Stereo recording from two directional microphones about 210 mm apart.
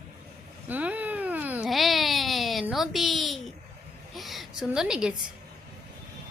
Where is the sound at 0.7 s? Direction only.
5° right (ahead or behind).